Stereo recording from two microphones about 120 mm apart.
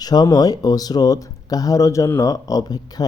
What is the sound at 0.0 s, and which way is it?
Speech, 35° left (ahead or behind).